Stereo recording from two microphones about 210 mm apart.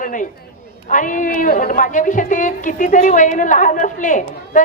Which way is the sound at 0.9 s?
40° left (ahead or behind).